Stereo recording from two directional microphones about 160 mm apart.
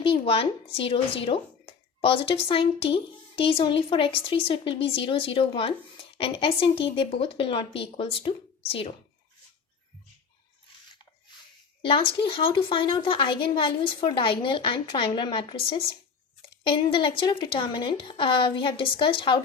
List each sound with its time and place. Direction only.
0.0 s speech: 35° left (ahead or behind)
11.8 s speech: 35° left (ahead or behind)